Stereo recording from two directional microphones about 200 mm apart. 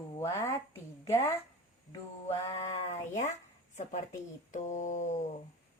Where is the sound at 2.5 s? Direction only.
30° left (ahead or behind).